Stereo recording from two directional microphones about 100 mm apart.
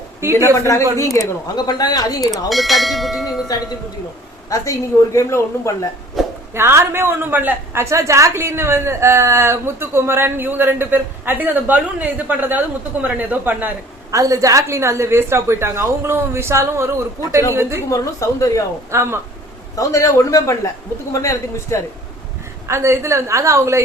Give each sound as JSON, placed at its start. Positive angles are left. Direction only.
{"t": 0.5, "sound": "speech", "side_deg": 30}
{"t": 1.1, "sound": "speech", "side_deg": 40}
{"t": 2.5, "sound": "bell", "side_deg": 0}
{"t": 4.4, "sound": "speech", "side_deg": 35}
{"t": 6.2, "sound": "a sound", "side_deg": 0}
{"t": 6.5, "sound": "a woman's voice", "side_deg": -25}
{"t": 14.1, "sound": "a woman's voice", "side_deg": -35}
{"t": 17.8, "sound": "speech", "side_deg": 35}
{"t": 18.9, "sound": "a woman's voice", "side_deg": -25}
{"t": 19.7, "sound": "speech", "side_deg": 35}
{"t": 22.6, "sound": "a woman's voice", "side_deg": -25}